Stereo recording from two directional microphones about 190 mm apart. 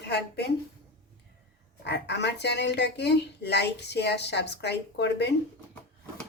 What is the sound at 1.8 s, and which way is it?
A woman's voice, 60° left (ahead or behind).